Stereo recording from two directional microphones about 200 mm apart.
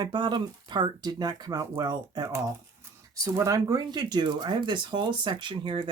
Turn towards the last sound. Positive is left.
turn(degrees=-25)  # may be behind; listen again after turning